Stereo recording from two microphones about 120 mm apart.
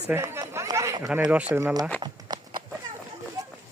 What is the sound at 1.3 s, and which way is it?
Speech, 10° right (ahead or behind).